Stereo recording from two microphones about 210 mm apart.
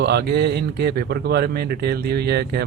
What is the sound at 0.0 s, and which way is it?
Speech, 50° right (ahead or behind).